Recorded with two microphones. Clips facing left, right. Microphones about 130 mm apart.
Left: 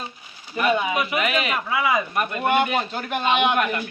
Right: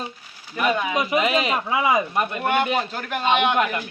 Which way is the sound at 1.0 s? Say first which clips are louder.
Right 3 dB; 30° right (ahead or behind).